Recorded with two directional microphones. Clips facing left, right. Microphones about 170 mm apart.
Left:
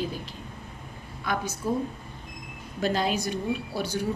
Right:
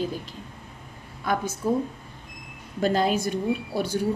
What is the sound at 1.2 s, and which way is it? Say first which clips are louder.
Speech: right 3 dB; 50° right (ahead or behind).